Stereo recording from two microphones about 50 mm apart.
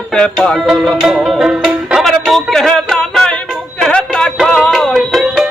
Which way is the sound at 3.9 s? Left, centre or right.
Centre.